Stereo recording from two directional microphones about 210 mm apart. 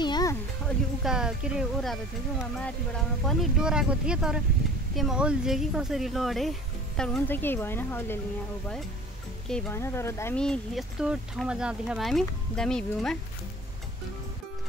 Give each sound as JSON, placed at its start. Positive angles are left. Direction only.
{"t": 0.0, "sound": "music", "side_deg": 20}
{"t": 1.0, "sound": "speech", "side_deg": -5}
{"t": 3.3, "sound": "speech", "side_deg": -5}
{"t": 9.5, "sound": "speech", "side_deg": 5}